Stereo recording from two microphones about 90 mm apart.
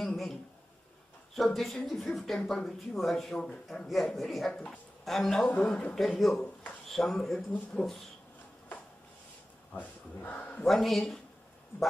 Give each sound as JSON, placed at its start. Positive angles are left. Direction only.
{"t": 0.0, "sound": "a sound", "side_deg": 5}
{"t": 1.3, "sound": "a man's voice", "side_deg": 0}
{"t": 10.2, "sound": "a man's voice", "side_deg": 20}
{"t": 10.6, "sound": "speech", "side_deg": 5}